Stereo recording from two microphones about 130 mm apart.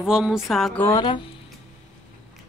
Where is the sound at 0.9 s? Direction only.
30° left (ahead or behind).